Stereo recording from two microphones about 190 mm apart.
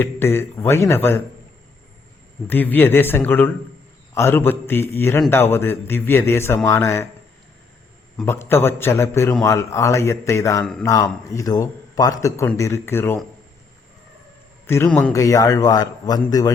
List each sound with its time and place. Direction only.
0.0 s a man's voice: 10° left (ahead or behind)
2.5 s a man's voice: 10° left (ahead or behind)
8.2 s a man's voice: 10° left (ahead or behind)
14.7 s a man's voice: 10° left (ahead or behind)